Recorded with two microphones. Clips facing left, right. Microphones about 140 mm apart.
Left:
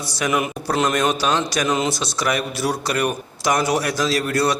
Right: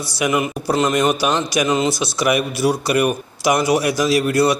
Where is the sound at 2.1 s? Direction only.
10° right (ahead or behind).